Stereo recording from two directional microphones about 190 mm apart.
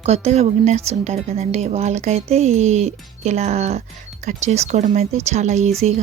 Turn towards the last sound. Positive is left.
turn(degrees=-35)  # may be behind; listen again after turning